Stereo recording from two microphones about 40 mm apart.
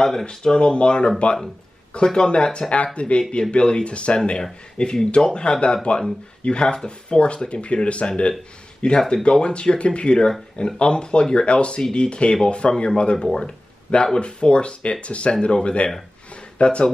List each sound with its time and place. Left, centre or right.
0.0 s speech: centre
4.4 s speech: centre
7.2 s speech: left